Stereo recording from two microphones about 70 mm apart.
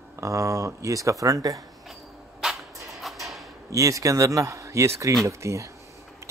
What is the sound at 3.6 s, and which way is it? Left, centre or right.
Speech, right.